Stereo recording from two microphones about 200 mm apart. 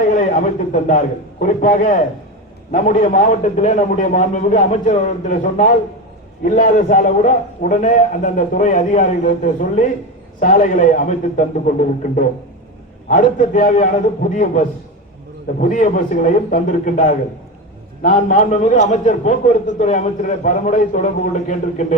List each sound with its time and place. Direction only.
0.1 s a man's voice: 40° left (ahead or behind)